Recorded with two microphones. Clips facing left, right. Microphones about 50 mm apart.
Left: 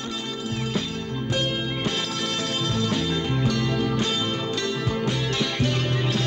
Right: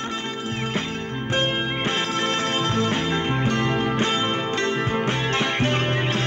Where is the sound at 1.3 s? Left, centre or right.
Right.